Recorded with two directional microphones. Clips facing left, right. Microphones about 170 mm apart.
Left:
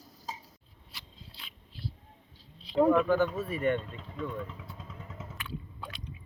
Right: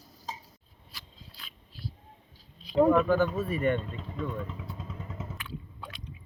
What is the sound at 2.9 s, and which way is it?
Speech, 45° right (ahead or behind).